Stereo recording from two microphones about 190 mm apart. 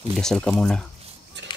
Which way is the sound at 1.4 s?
65° right (ahead or behind).